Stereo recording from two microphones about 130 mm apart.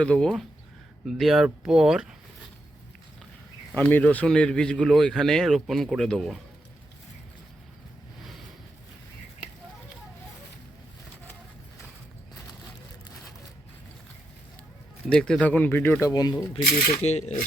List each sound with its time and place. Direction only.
0.0 s a man's voice: 5° left (ahead or behind)
3.8 s a man's voice: 10° left (ahead or behind)
15.1 s speech: 5° left (ahead or behind); by 16.4 s 30° left (ahead or behind)
17.0 s coin: 55° left (ahead or behind)